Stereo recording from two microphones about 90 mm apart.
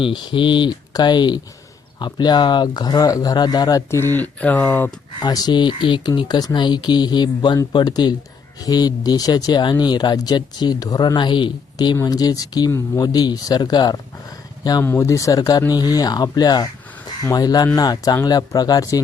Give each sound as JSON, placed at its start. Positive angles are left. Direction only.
{"t": 0.0, "sound": "speech", "side_deg": 65}
{"t": 4.0, "sound": "speech", "side_deg": 20}
{"t": 5.2, "sound": "speech", "side_deg": 50}
{"t": 12.0, "sound": "speech", "side_deg": 45}
{"t": 14.8, "sound": "speech", "side_deg": 35}